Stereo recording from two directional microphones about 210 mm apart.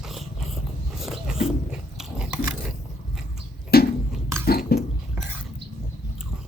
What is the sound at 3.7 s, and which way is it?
Chewing, 45° left (ahead or behind).